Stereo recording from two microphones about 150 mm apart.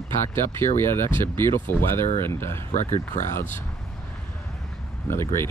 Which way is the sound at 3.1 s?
55° left (ahead or behind).